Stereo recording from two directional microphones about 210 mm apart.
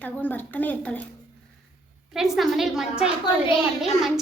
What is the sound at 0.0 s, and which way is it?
A woman's voice, 10° left (ahead or behind).